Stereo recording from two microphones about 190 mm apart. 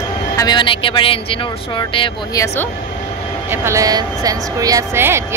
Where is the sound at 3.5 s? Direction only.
15° right (ahead or behind).